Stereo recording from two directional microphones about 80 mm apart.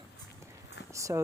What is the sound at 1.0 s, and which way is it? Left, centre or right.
Speech, right.